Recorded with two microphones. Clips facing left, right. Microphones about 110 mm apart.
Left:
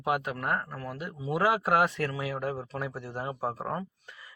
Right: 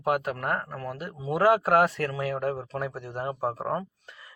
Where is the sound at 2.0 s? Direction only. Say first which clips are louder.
Right 3 dB; 45° right (ahead or behind).